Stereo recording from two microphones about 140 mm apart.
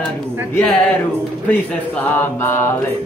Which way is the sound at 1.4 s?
10° left (ahead or behind).